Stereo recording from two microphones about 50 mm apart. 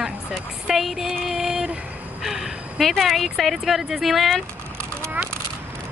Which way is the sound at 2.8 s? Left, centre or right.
Centre.